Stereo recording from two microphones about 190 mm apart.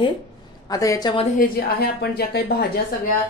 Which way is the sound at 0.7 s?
20° left (ahead or behind).